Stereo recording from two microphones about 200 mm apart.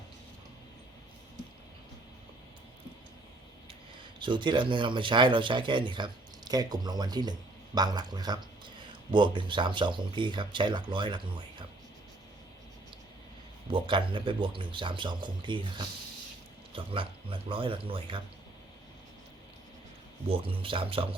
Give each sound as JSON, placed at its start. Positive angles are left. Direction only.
{"t": 4.2, "sound": "speech", "side_deg": -25}
{"t": 13.7, "sound": "speech", "side_deg": -25}
{"t": 20.3, "sound": "speech", "side_deg": -25}